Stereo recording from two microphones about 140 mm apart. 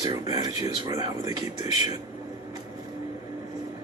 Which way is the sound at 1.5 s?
50° left (ahead or behind).